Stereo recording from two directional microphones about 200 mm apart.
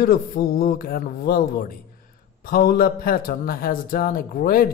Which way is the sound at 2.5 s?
45° left (ahead or behind).